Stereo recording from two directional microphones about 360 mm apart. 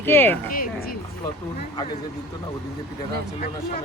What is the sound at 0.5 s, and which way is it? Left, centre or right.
Speech, left.